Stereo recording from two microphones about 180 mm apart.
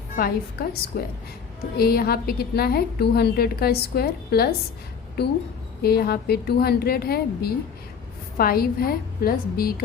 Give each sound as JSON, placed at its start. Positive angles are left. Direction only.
{"t": 0.2, "sound": "a woman's voice", "side_deg": 55}